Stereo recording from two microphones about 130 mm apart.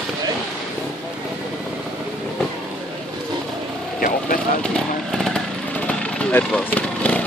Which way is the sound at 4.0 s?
90° left.